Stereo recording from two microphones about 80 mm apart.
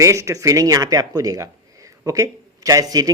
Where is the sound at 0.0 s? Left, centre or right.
Right.